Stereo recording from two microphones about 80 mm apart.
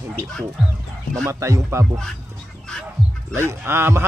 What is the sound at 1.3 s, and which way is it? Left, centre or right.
Speech, right.